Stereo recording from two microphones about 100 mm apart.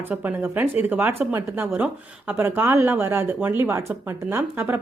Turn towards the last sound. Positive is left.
turn(degrees=-20)  # may be behind; listen again after turning